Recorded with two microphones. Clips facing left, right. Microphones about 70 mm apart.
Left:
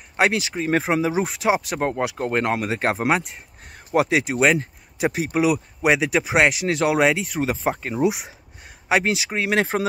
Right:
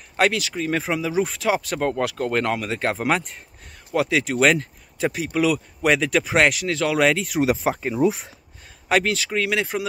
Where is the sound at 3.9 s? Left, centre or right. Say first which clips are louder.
Left 1 dB; left.